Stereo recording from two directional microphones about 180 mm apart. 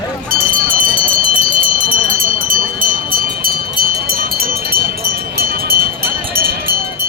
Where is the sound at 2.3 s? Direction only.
50° right (ahead or behind).